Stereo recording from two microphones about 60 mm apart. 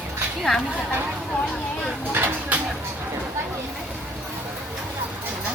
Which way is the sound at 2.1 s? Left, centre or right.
Right.